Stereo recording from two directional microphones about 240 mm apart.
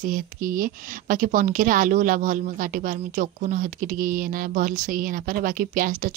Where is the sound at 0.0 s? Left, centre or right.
Right.